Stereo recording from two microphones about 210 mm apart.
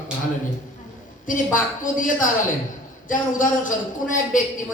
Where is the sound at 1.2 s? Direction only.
40° left (ahead or behind).